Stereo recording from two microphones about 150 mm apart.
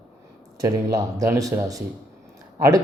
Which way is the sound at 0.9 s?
20° right (ahead or behind).